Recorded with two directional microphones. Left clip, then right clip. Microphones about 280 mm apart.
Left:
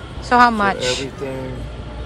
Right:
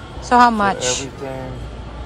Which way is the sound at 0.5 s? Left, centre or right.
Centre.